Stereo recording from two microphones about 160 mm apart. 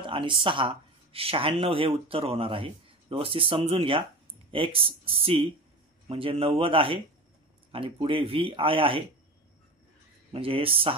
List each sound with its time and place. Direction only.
0.0 s a sound: 30° right (ahead or behind)
0.4 s speech: 30° right (ahead or behind)
10.3 s speech: 35° right (ahead or behind)